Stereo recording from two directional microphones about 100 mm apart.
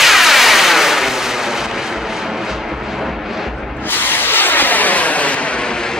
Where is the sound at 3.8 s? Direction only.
20° left (ahead or behind).